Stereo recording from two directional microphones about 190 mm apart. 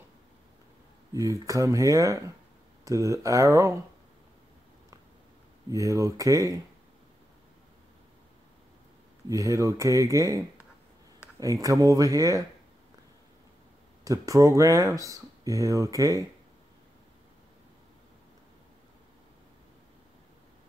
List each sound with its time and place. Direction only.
1.1 s speech: 15° right (ahead or behind)
5.7 s speech: 15° right (ahead or behind)
9.3 s speech: 15° right (ahead or behind)
14.0 s speech: 15° right (ahead or behind)